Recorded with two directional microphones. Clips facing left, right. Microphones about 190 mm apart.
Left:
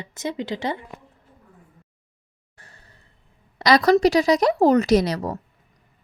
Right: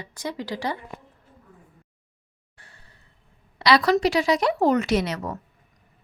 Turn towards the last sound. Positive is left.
turn(degrees=35)  # may be behind; listen again after turning